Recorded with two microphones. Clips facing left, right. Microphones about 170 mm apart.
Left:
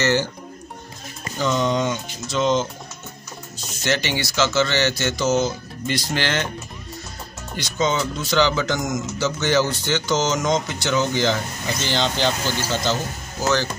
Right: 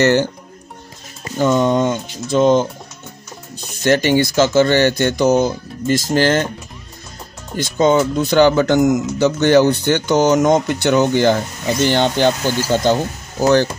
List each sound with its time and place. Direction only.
0.0 s speech: 60° right (ahead or behind)
1.4 s speech: 50° right (ahead or behind)
3.8 s speech: 50° right (ahead or behind)
7.5 s speech: 50° right (ahead or behind)